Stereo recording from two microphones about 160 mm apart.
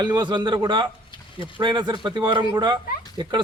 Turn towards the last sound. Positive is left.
turn(degrees=-25)  # may be behind; listen again after turning